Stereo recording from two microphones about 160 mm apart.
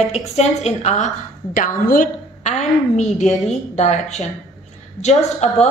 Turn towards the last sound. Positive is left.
turn(degrees=45)  # may be behind; listen again after turning